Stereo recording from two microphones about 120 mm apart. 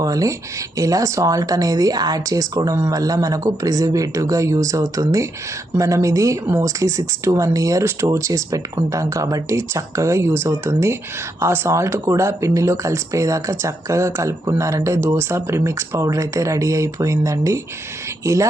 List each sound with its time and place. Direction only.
0.0 s speech: 30° right (ahead or behind)